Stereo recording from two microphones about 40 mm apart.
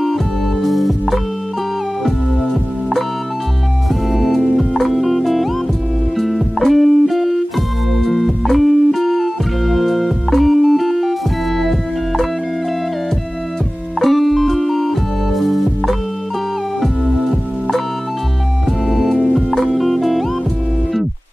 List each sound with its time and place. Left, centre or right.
0.0 s music: centre
4.1 s music: centre
13.9 s music: centre
18.9 s music: centre